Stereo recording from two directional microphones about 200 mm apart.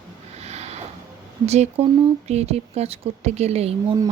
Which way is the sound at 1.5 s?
30° right (ahead or behind).